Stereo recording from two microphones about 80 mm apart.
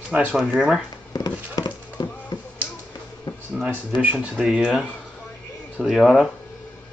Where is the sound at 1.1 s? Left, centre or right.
Left.